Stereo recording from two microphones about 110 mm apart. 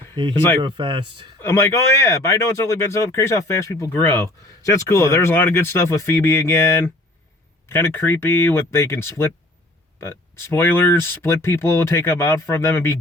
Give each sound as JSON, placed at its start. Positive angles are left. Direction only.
{"t": 0.3, "sound": "speech", "side_deg": 20}
{"t": 0.6, "sound": "speech", "side_deg": -45}
{"t": 1.4, "sound": "speech", "side_deg": 25}